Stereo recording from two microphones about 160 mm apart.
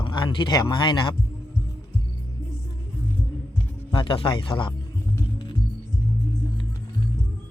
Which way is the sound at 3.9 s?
30° left (ahead or behind).